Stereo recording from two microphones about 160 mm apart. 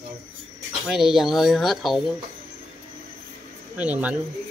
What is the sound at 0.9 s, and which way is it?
Speech, centre (ahead or behind).